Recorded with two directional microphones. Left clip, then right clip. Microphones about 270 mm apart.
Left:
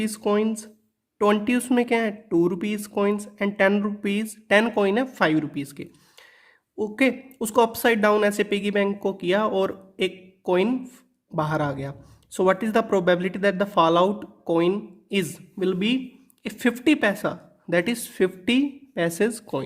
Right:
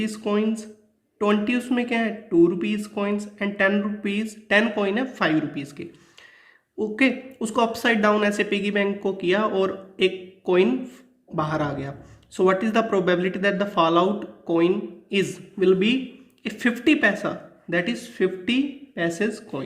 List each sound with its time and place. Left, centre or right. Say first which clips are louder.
0.0 s speech: left 1 dB; left